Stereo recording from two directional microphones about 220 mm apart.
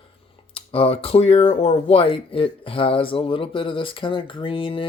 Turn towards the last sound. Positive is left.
turn(degrees=25)  # may be behind; listen again after turning